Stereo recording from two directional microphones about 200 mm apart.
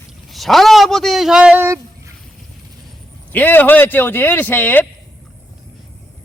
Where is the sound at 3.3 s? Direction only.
10° left (ahead or behind).